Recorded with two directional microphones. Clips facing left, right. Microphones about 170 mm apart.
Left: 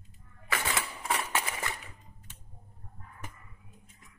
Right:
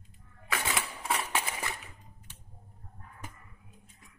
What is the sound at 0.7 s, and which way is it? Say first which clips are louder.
Typewriter: right 1 dB; centre (ahead or behind).